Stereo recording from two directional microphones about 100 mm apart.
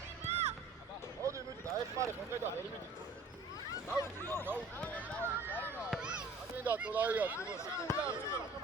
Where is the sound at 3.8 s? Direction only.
25° left (ahead or behind).